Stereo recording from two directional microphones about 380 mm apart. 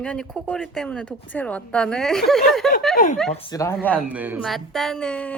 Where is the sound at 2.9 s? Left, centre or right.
Left.